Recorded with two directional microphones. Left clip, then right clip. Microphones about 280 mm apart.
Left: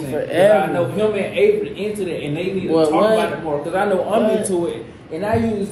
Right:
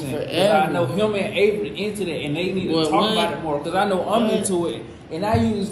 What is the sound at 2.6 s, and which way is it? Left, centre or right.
Speech, centre.